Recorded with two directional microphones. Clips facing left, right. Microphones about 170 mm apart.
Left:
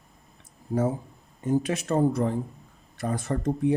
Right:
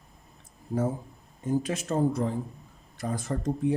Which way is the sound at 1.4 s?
65° left (ahead or behind).